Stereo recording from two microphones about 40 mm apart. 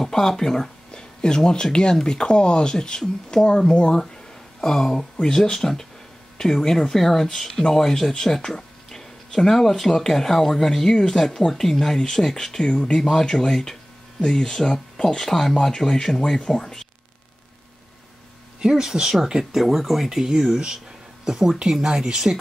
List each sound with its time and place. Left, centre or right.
0.0 s speech: centre
4.6 s speech: centre
18.6 s speech: centre